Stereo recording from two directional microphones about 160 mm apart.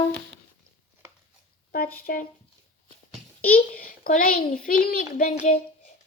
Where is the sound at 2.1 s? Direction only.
65° left (ahead or behind).